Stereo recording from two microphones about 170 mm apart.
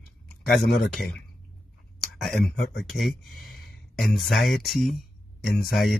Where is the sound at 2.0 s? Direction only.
Centre (ahead or behind).